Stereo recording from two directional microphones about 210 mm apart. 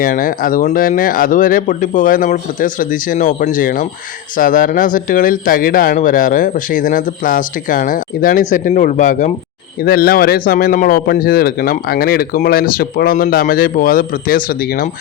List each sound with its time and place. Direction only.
0.0 s speech: 40° left (ahead or behind)